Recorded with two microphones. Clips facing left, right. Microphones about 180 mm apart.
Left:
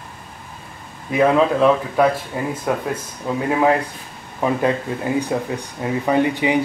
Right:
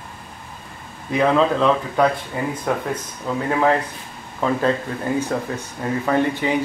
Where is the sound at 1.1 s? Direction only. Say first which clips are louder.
Left 2 dB; 10° left (ahead or behind).